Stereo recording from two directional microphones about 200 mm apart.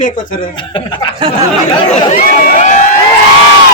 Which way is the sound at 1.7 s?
30° left (ahead or behind).